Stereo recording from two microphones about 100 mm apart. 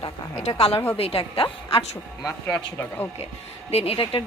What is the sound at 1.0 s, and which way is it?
Speech, 70° left (ahead or behind).